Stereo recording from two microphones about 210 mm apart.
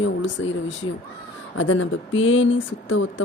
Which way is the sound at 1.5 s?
65° left (ahead or behind).